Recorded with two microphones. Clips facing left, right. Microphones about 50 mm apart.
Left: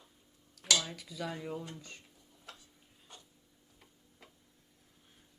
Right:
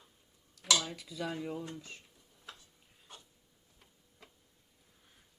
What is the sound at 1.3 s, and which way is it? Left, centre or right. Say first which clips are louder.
Speech: right 3 dB; centre.